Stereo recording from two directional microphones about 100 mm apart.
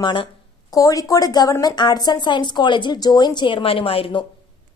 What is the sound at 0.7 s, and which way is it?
A woman's voice, 35° left (ahead or behind).